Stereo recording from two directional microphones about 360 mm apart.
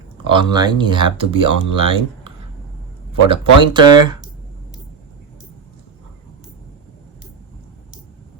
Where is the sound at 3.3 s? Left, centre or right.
Centre.